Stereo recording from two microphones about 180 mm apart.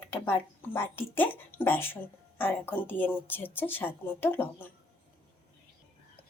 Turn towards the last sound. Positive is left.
turn(degrees=10)  # may be behind; listen again after turning